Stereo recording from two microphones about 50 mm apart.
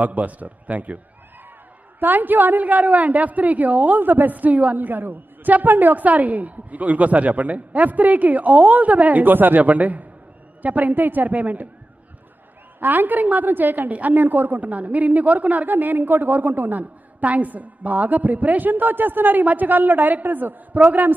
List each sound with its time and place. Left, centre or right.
0.0 s a woman's voice: right
2.0 s a woman's voice: right
12.8 s a woman's voice: right